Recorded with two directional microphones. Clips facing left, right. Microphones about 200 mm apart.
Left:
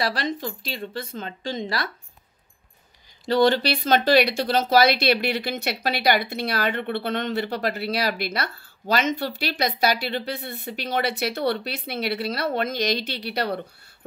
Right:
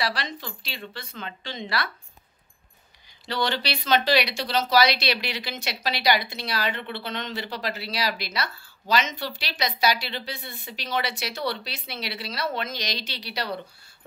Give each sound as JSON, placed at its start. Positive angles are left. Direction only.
{"t": 0.0, "sound": "speech", "side_deg": 45}
{"t": 3.3, "sound": "speech", "side_deg": 45}